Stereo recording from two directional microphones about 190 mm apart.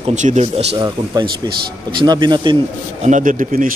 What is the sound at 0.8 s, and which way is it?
Speech, 20° right (ahead or behind).